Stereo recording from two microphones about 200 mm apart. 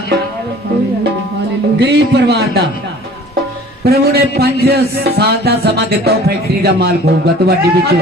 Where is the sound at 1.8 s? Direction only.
55° right (ahead or behind).